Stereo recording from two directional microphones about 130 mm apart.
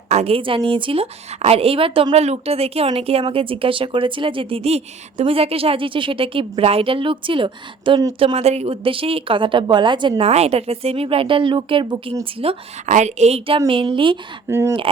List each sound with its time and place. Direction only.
0.1 s a woman's voice: 50° right (ahead or behind); by 10.2 s 35° right (ahead or behind)
10.2 s speech: 50° right (ahead or behind)
12.8 s a woman's voice: 70° right (ahead or behind); by 13.6 s 55° right (ahead or behind)
13.7 s speech: 40° right (ahead or behind)
14.4 s speech: 20° right (ahead or behind)